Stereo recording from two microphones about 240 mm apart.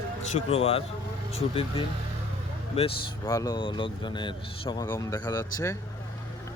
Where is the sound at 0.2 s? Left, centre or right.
Left.